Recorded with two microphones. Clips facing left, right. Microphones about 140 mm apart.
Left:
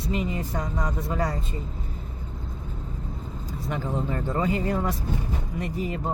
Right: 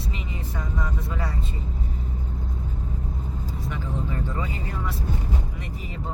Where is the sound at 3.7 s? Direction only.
45° left (ahead or behind).